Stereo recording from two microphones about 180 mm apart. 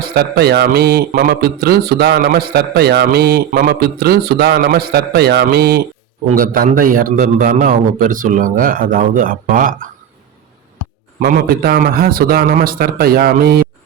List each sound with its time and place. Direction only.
0.1 s a man's voice: 65° right (ahead or behind)
11.2 s speech: 55° right (ahead or behind)